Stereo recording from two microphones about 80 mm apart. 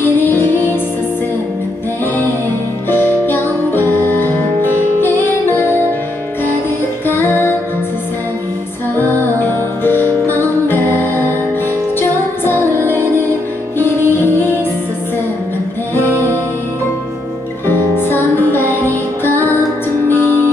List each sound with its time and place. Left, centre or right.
0.0 s music: left
2.9 s music: left
7.1 s music: left
9.4 s music: left
13.7 s music: left
16.1 s music: right
17.6 s music: left